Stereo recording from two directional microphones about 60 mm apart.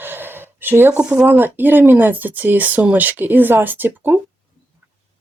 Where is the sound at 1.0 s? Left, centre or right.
Centre.